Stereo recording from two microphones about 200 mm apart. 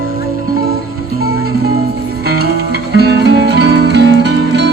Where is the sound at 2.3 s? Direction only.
55° right (ahead or behind).